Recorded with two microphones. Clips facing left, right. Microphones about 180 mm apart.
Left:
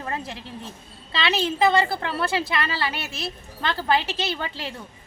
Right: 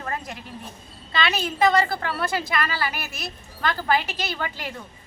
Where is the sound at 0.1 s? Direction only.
25° left (ahead or behind).